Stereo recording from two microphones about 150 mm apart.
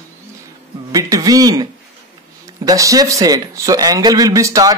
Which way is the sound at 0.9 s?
25° right (ahead or behind).